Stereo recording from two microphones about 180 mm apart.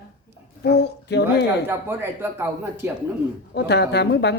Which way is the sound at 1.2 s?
10° right (ahead or behind).